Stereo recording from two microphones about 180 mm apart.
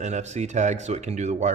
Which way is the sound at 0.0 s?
40° right (ahead or behind).